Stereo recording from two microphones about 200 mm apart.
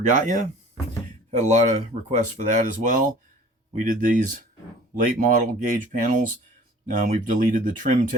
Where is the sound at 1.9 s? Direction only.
40° right (ahead or behind).